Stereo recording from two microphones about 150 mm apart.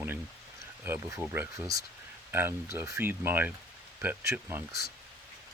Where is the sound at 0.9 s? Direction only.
15° right (ahead or behind).